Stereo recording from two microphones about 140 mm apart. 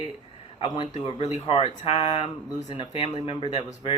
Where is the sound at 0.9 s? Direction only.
55° left (ahead or behind).